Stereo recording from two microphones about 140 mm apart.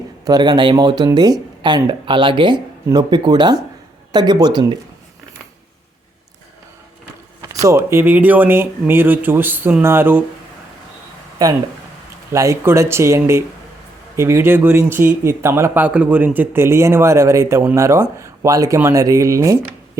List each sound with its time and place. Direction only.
0.3 s speech: 30° right (ahead or behind)
7.4 s speech: 25° right (ahead or behind)
11.4 s speech: 25° right (ahead or behind)